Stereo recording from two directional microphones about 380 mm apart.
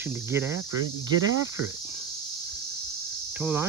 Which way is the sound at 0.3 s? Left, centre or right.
Centre.